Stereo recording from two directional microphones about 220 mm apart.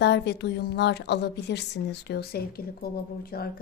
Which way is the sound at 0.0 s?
50° left (ahead or behind).